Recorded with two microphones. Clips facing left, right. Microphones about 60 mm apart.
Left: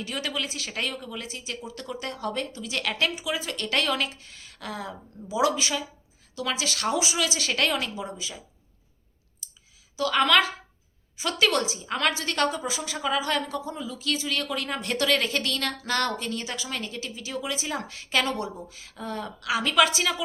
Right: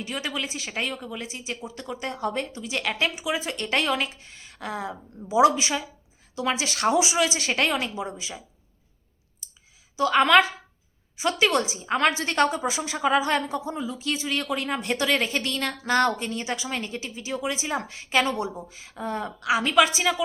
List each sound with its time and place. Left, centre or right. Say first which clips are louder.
0.0 s a woman's voice: right 1 dB; centre
10.0 s a woman's voice: right 3 dB; right